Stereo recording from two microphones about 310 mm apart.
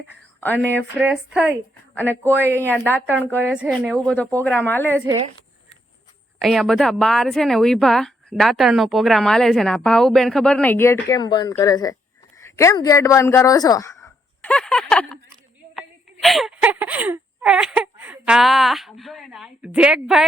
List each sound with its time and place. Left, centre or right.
0.6 s a woman's voice: centre
3.3 s a woman's voice: centre
6.4 s a woman's voice: centre
12.4 s a sound: centre
16.2 s speech: centre